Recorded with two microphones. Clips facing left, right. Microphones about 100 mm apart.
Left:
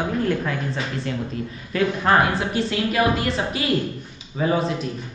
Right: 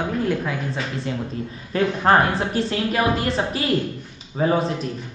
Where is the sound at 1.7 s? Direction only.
35° right (ahead or behind).